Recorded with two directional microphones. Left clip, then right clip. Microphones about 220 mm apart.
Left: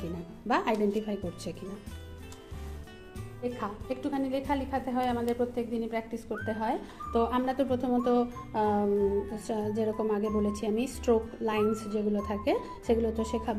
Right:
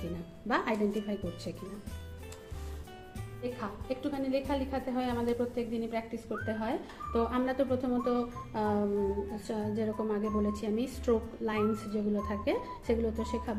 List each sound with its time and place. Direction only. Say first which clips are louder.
0.0 s a woman's voice: left 2 dB; 30° left (ahead or behind)
3.6 s a woman's voice: left 2 dB; 40° left (ahead or behind)